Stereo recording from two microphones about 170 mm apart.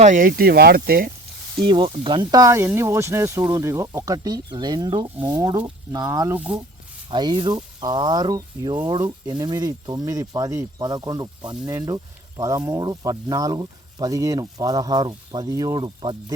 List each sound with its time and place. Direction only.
0.0 s speech: 50° right (ahead or behind)
1.6 s speech: 30° right (ahead or behind); by 6.6 s 10° right (ahead or behind)
7.1 s speech: 25° right (ahead or behind)